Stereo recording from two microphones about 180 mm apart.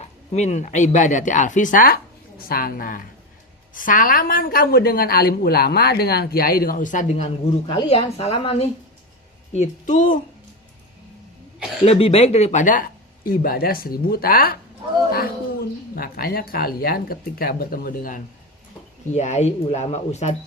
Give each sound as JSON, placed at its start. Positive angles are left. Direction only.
{"t": 0.0, "sound": "a woman's voice", "side_deg": 35}
{"t": 11.9, "sound": "a woman's voice", "side_deg": 35}
{"t": 16.0, "sound": "speech", "side_deg": 55}
{"t": 19.1, "sound": "speech", "side_deg": 40}